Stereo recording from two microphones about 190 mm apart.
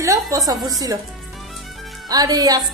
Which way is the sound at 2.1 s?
20° right (ahead or behind).